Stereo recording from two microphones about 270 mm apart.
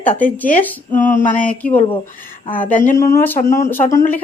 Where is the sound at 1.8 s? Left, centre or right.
Left.